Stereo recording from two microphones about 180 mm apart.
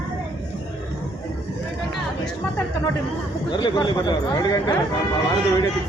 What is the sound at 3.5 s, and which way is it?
Speech, 25° left (ahead or behind).